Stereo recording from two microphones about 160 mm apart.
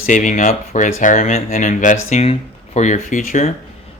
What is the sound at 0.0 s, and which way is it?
Speech, 50° left (ahead or behind).